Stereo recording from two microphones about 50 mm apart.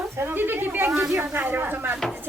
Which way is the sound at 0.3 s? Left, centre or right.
Right.